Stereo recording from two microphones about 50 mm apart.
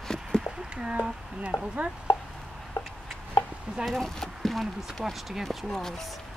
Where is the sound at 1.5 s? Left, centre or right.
Left.